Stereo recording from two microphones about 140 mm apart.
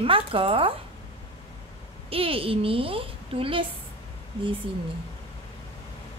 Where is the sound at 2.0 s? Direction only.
40° right (ahead or behind).